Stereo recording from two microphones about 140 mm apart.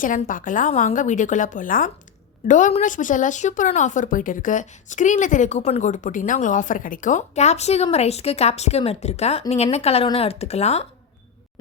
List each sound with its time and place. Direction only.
0.0 s a woman's voice: 70° left (ahead or behind)
0.7 s a woman's voice: 60° left (ahead or behind)